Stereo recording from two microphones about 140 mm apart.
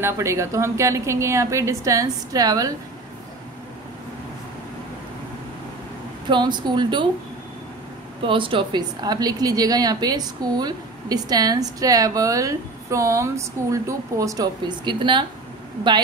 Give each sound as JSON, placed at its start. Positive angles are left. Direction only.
{"t": 0.0, "sound": "a woman's voice", "side_deg": -20}
{"t": 6.2, "sound": "speech", "side_deg": -35}
{"t": 8.3, "sound": "a woman's voice", "side_deg": -40}